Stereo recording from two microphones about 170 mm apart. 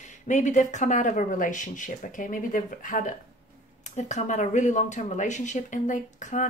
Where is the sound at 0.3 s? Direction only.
45° left (ahead or behind).